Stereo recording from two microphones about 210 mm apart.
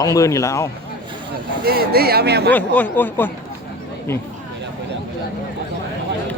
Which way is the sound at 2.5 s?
5° left (ahead or behind).